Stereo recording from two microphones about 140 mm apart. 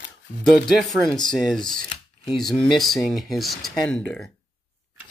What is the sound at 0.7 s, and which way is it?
Speech, 5° left (ahead or behind).